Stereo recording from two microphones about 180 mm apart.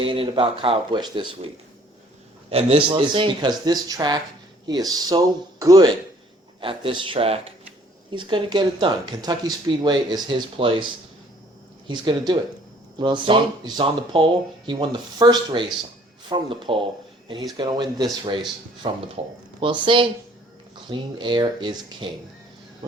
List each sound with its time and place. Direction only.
0.0 s speech: 30° right (ahead or behind)
2.5 s speech: 35° right (ahead or behind)